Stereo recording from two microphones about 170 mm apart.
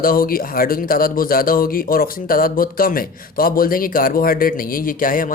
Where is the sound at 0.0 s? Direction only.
55° left (ahead or behind).